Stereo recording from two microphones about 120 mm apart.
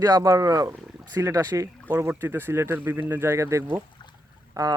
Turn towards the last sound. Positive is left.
turn(degrees=-30)  # may be behind; listen again after turning